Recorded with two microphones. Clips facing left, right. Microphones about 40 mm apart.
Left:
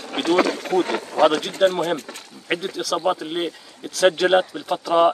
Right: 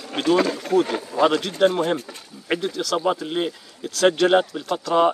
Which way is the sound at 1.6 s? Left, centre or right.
Centre.